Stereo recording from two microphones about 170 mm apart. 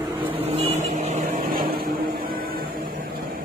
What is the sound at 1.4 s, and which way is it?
Vehicle, 60° right (ahead or behind).